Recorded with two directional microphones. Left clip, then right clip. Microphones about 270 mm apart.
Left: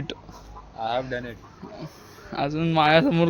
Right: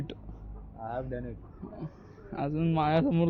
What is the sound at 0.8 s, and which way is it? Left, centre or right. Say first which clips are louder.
Speech: left 9 dB; left.